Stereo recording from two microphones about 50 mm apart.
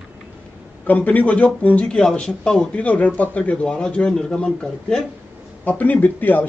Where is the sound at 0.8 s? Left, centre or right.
Left.